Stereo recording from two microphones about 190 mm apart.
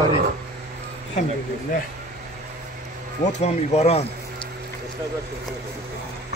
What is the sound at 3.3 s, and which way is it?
Speech, 35° left (ahead or behind).